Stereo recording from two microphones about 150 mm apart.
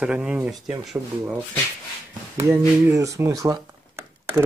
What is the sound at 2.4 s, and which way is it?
Speech, 20° right (ahead or behind).